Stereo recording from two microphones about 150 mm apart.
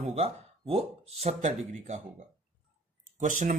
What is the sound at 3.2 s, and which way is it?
Speech, 55° right (ahead or behind).